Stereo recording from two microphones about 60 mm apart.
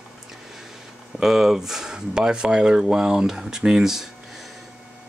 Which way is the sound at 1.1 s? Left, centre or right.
Centre.